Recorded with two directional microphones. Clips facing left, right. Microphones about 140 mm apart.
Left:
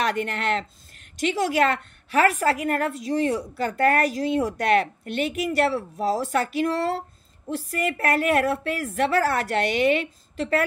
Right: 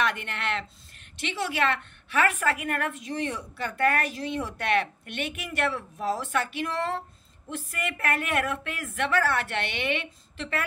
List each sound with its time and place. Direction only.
0.0 s a woman's voice: 40° left (ahead or behind)